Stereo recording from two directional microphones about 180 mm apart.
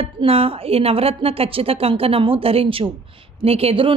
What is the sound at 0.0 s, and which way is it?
Speech, 30° right (ahead or behind).